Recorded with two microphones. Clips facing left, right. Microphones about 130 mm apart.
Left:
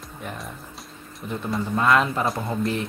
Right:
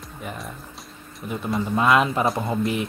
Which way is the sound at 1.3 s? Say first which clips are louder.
Right 2 dB; 10° right (ahead or behind).